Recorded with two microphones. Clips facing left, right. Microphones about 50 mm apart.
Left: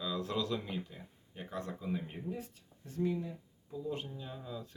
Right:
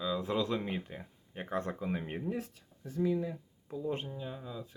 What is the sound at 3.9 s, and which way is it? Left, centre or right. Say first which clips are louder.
Speech: right 2 dB; right.